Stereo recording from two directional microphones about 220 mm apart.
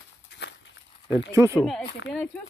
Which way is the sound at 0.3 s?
50° left (ahead or behind).